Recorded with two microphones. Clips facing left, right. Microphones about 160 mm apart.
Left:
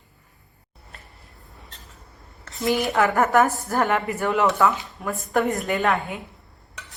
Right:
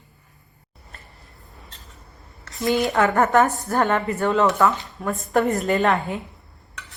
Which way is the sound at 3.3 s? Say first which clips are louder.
Right 1 dB; 20° right (ahead or behind).